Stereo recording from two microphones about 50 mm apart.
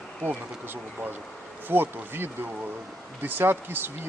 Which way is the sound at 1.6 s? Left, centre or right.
Right.